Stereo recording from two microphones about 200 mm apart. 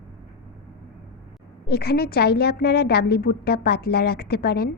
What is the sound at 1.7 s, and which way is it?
A woman's voice, 50° left (ahead or behind).